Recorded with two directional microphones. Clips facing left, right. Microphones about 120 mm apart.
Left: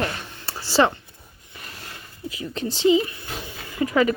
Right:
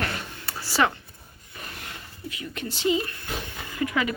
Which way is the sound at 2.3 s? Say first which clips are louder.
Left 6 dB; 30° left (ahead or behind).